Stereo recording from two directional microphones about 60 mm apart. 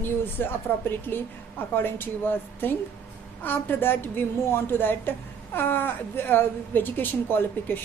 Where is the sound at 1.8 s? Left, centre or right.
Left.